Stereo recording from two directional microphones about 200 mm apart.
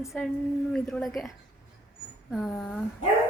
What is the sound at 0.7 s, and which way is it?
Speech, 5° left (ahead or behind).